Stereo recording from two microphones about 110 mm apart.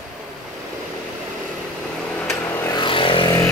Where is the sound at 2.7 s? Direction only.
50° left (ahead or behind).